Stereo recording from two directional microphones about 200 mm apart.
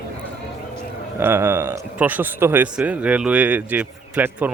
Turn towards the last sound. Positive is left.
turn(degrees=-5)  # may be behind; listen again after turning